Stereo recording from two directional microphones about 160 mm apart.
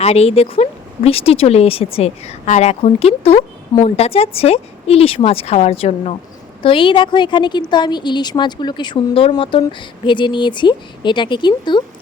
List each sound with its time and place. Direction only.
0.0 s a woman's voice: 40° left (ahead or behind)